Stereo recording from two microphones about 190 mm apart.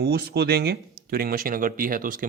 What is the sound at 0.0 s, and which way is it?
A man's voice, 55° right (ahead or behind).